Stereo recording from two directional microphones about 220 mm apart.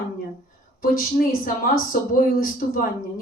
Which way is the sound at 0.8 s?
40° left (ahead or behind).